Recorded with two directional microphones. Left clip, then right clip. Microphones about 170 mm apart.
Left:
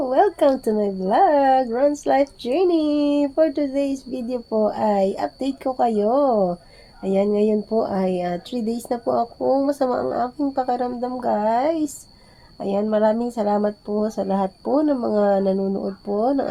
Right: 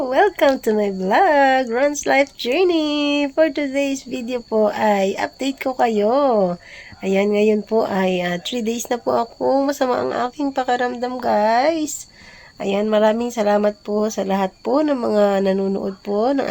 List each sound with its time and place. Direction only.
0.1 s speech: centre (ahead or behind)
6.3 s speech: 30° right (ahead or behind)
7.0 s speech: 10° right (ahead or behind)
9.4 s speech: 35° right (ahead or behind)
9.6 s speech: 10° right (ahead or behind)
15.5 s speech: 25° right (ahead or behind)
16.2 s speech: 10° right (ahead or behind)